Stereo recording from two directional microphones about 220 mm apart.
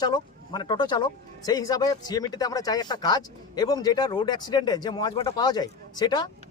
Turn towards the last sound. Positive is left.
turn(degrees=20)  # may be behind; listen again after turning